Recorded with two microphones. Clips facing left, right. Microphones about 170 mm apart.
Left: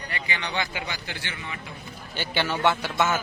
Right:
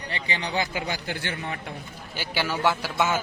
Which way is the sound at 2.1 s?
10° right (ahead or behind).